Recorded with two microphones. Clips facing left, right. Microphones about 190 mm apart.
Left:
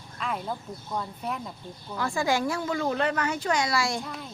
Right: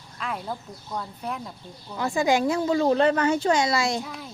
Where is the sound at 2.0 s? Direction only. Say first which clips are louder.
Right 4 dB; 20° right (ahead or behind).